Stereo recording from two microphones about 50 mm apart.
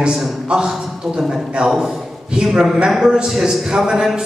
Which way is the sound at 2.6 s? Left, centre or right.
Centre.